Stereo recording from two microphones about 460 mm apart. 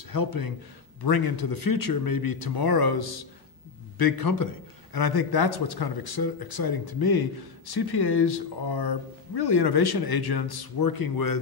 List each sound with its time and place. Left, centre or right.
0.1 s a man's voice: left